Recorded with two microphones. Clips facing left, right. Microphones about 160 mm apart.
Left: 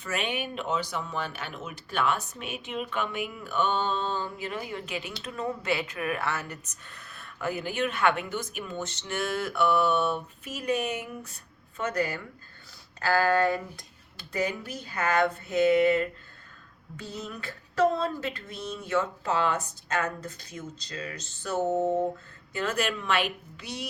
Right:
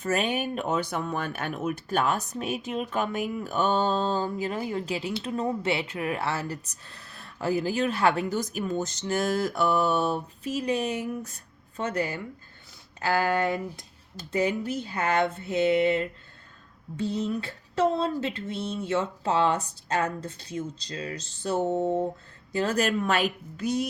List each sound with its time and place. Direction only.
0.0 s speech: 40° right (ahead or behind)
11.8 s a sound: 30° right (ahead or behind)
17.0 s speech: 30° right (ahead or behind)